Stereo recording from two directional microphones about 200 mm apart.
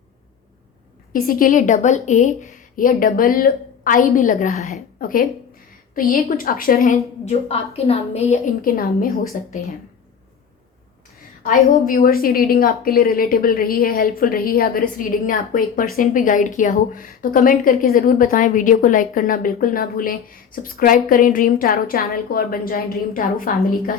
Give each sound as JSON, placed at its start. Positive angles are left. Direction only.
{"t": 1.1, "sound": "a woman's voice", "side_deg": 45}
{"t": 6.9, "sound": "a woman's voice", "side_deg": 30}
{"t": 11.4, "sound": "a woman's voice", "side_deg": 40}